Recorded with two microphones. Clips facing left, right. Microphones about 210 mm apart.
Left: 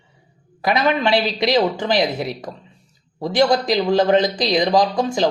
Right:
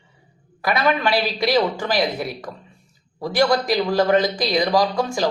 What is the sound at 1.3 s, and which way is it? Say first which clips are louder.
Speech: left 2 dB; 20° left (ahead or behind).